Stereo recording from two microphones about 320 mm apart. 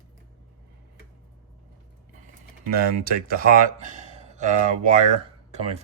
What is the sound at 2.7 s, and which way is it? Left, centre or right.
Speech, right.